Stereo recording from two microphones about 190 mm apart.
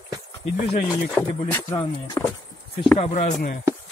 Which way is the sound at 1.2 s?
5° left (ahead or behind).